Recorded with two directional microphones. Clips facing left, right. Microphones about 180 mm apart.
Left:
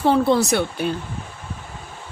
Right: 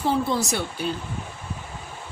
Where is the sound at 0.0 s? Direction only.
65° left (ahead or behind).